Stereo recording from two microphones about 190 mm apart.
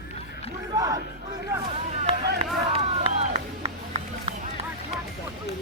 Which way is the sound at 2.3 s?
35° right (ahead or behind).